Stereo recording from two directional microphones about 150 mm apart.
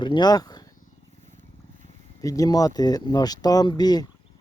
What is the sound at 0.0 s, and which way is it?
Speech, 30° left (ahead or behind).